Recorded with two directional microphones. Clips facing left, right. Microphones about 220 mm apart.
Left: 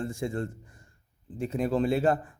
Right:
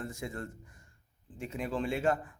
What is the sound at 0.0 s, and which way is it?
A man's voice, 30° left (ahead or behind).